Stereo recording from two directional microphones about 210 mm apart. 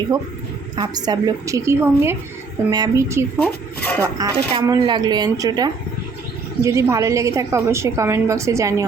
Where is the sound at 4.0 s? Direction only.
15° right (ahead or behind).